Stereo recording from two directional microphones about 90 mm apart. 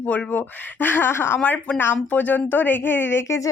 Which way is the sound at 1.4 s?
15° left (ahead or behind).